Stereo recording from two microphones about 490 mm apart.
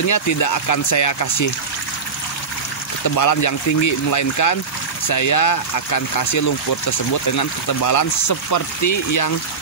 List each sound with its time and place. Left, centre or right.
0.0 s speech: left
3.2 s speech: left